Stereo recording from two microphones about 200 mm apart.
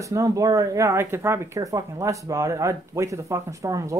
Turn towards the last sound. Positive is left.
turn(degrees=-15)  # may be behind; listen again after turning